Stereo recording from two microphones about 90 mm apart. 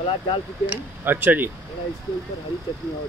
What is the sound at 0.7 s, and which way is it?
Speech, 20° right (ahead or behind).